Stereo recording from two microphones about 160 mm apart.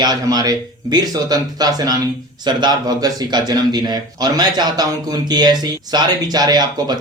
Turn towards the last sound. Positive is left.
turn(degrees=-25)  # may be behind; listen again after turning